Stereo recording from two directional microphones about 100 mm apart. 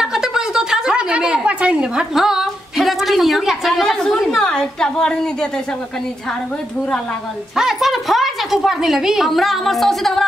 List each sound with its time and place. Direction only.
0.0 s a woman's voice: 5° right (ahead or behind)
7.5 s speech: 5° right (ahead or behind)